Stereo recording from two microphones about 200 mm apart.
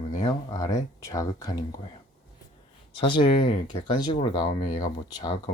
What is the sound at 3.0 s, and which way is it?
Speech, 25° left (ahead or behind).